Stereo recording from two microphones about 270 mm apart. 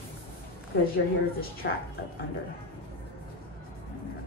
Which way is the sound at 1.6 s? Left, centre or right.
Left.